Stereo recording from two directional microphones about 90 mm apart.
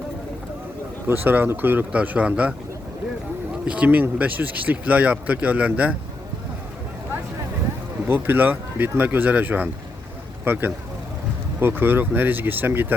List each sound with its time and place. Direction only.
1.0 s speech: 20° right (ahead or behind)
3.7 s speech: 15° right (ahead or behind)
8.0 s speech: 25° right (ahead or behind)